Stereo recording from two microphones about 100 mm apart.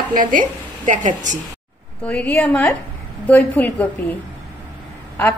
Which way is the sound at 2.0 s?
15° left (ahead or behind).